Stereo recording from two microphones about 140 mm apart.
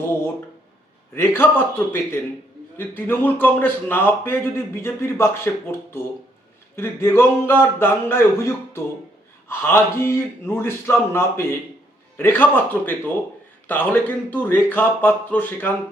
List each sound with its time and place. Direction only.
1.1 s a man's voice: 15° left (ahead or behind)